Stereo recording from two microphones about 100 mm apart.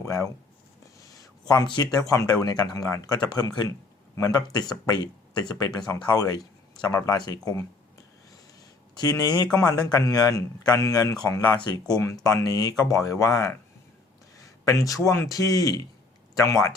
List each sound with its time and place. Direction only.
0.0 s speech: 35° left (ahead or behind)
1.0 s a sound: 35° left (ahead or behind)
1.6 s speech: 50° left (ahead or behind)
2.0 s speech: 35° left (ahead or behind)
9.0 s speech: 40° left (ahead or behind)
11.1 s speech: 10° left (ahead or behind)
12.2 s speech: 35° left (ahead or behind)
14.3 s a sound: 35° left (ahead or behind)
15.3 s speech: 35° left (ahead or behind)